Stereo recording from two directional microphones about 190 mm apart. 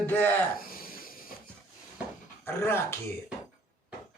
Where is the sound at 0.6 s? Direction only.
50° left (ahead or behind).